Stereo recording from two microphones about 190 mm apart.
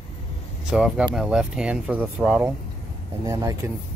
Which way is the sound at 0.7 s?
5° right (ahead or behind).